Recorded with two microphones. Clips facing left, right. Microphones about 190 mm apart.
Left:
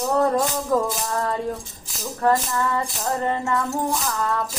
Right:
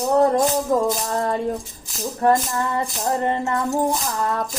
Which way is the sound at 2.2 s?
25° right (ahead or behind).